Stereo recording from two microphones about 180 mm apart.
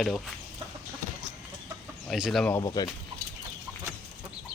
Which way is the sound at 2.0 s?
Centre (ahead or behind).